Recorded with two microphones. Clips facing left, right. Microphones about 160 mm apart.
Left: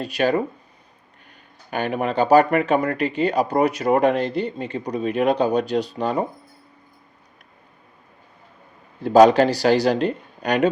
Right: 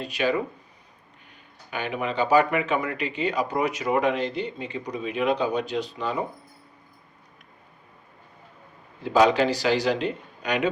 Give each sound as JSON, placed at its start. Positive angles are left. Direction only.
{"t": 0.0, "sound": "speech", "side_deg": 40}
{"t": 1.7, "sound": "speech", "side_deg": 45}
{"t": 9.0, "sound": "speech", "side_deg": 40}